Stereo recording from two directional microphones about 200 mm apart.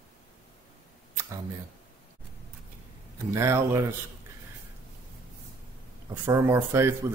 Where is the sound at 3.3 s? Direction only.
15° right (ahead or behind).